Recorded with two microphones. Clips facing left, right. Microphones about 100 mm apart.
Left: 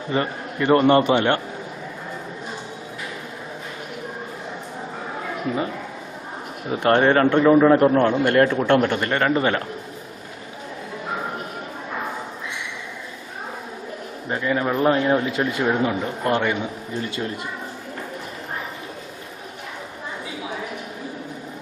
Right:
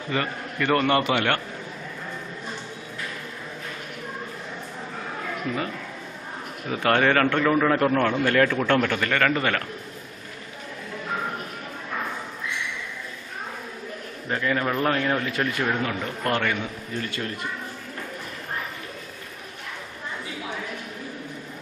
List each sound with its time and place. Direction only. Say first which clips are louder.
0.1 s a man's voice: left 4 dB; 25° left (ahead or behind)
6.7 s a man's voice: left 4 dB; 25° left (ahead or behind)
14.3 s a man's voice: left 2 dB; 20° left (ahead or behind)